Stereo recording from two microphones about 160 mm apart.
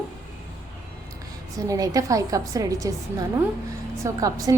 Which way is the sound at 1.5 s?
20° right (ahead or behind).